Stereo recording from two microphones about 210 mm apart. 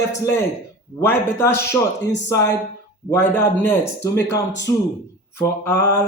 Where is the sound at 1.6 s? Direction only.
55° left (ahead or behind).